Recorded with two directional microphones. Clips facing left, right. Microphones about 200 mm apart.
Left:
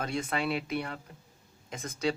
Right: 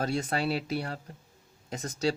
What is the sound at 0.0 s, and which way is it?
Speech, 35° right (ahead or behind).